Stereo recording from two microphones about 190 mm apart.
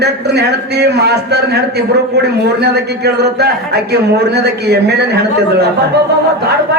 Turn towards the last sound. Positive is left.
turn(degrees=-60)  # may be behind; listen again after turning